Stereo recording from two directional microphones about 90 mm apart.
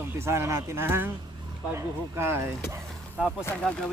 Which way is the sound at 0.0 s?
30° right (ahead or behind).